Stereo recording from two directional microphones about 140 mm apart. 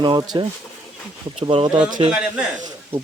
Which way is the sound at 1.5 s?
35° right (ahead or behind).